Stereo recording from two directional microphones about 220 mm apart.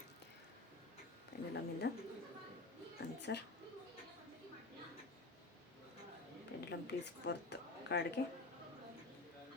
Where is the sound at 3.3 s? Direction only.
50° left (ahead or behind).